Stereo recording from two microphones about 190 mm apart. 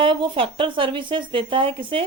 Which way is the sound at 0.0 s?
25° right (ahead or behind).